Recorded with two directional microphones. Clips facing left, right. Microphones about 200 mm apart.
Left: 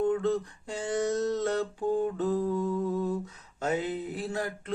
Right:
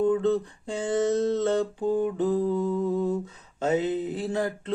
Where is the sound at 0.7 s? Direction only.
25° right (ahead or behind).